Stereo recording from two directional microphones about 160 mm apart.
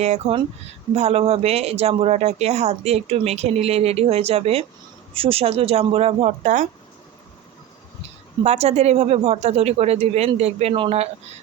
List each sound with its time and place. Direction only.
0.0 s speech: 40° right (ahead or behind)
8.4 s speech: 40° right (ahead or behind)